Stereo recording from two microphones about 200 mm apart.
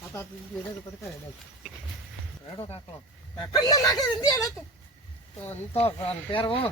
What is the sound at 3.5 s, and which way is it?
Speech, 20° left (ahead or behind).